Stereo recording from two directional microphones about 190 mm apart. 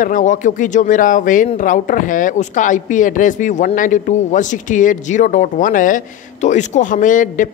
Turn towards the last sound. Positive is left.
turn(degrees=45)  # may be behind; listen again after turning